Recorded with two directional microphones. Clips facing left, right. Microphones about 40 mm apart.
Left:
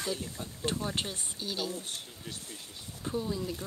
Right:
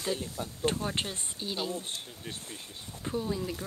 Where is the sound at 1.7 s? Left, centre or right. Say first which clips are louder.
Right 2 dB; right.